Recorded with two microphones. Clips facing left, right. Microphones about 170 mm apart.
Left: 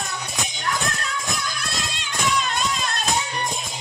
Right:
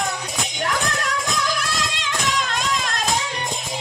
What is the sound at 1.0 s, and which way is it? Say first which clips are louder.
Music: right 5 dB; 90° right.